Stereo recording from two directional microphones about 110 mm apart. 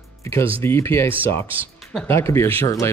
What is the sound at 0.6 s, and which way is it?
Speech, 25° left (ahead or behind).